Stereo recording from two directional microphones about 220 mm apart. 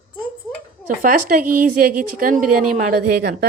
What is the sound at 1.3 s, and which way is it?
A woman's voice, 40° right (ahead or behind).